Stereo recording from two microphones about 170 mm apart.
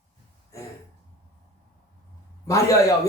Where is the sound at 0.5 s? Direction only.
15° left (ahead or behind).